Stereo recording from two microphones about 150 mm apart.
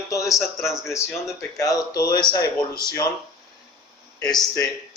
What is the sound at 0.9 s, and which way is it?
Speech, 20° left (ahead or behind).